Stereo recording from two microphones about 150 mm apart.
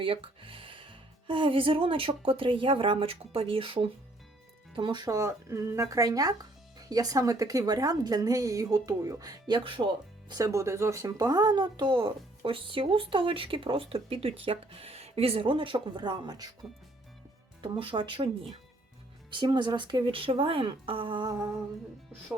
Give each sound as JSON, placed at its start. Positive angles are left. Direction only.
{"t": 0.0, "sound": "speech", "side_deg": -35}
{"t": 17.6, "sound": "speech", "side_deg": -35}
{"t": 19.3, "sound": "speech", "side_deg": -30}